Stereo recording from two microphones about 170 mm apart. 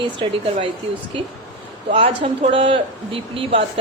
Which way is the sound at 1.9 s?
35° right (ahead or behind).